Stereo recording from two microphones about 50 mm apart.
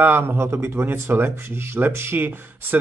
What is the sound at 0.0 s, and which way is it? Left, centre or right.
Speech, right.